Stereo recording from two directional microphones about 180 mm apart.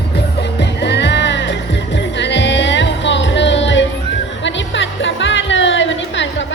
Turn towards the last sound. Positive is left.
turn(degrees=90)